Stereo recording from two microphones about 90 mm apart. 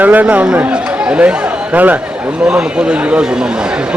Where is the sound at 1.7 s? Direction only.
15° right (ahead or behind).